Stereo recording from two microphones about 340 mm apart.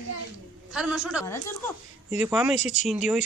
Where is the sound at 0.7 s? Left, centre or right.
Centre.